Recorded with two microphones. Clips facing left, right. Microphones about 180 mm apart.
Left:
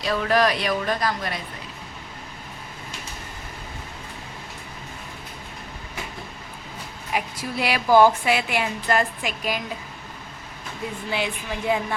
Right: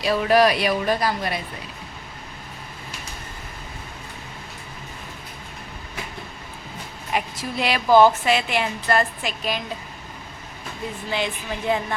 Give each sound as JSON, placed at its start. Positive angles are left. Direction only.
{"t": 0.0, "sound": "speech", "side_deg": -10}
{"t": 7.1, "sound": "a woman's voice", "side_deg": 10}
{"t": 11.1, "sound": "a woman's voice", "side_deg": 10}